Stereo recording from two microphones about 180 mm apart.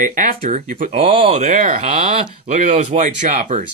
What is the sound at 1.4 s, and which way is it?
Speech, 45° right (ahead or behind).